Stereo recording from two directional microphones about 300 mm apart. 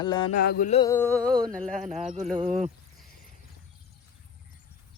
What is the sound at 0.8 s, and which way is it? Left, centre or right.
Speech, centre.